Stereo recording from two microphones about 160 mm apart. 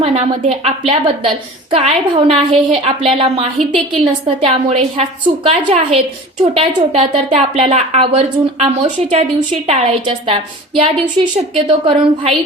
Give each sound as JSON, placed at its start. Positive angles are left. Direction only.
{"t": 0.0, "sound": "a woman's voice", "side_deg": -40}